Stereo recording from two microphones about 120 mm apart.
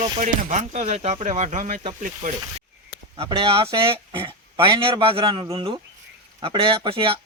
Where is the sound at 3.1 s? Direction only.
50° right (ahead or behind).